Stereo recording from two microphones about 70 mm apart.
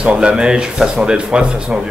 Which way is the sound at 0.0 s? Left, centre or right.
Centre.